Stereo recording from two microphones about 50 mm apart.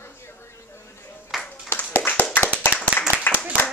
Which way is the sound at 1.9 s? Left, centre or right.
Left.